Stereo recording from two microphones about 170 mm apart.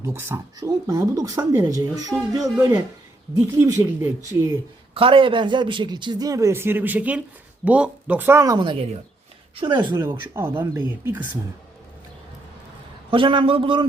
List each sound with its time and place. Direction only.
0.0 s speech: 15° right (ahead or behind)
4.9 s speech: 30° right (ahead or behind)
10.1 s speech: 15° right (ahead or behind)
13.1 s speech: 30° right (ahead or behind)